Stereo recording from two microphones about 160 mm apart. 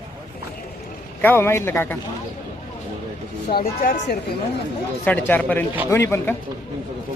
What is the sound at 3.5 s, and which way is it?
Speech, 65° left (ahead or behind).